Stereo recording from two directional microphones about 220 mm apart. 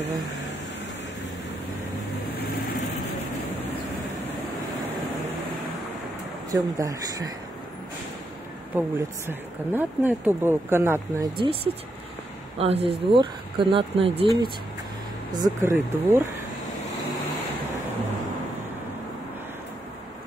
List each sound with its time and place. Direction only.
6.5 s speech: 15° right (ahead or behind)
8.7 s speech: 10° right (ahead or behind)
11.3 s speech: 25° right (ahead or behind)